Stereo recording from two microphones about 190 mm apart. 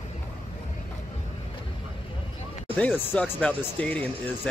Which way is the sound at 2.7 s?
10° left (ahead or behind).